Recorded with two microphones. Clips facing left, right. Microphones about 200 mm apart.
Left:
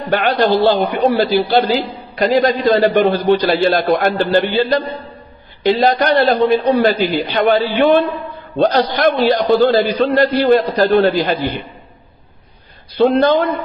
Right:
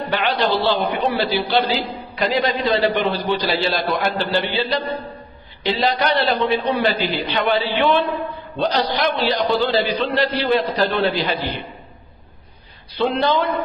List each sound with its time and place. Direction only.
0.2 s a man's voice: 45° left (ahead or behind)
13.2 s a man's voice: 45° left (ahead or behind)